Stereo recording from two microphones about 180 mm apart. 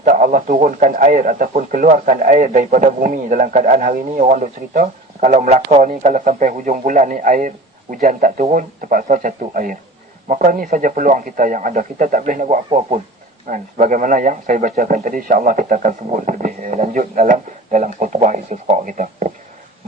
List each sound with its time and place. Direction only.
0.0 s a man's voice: 50° right (ahead or behind)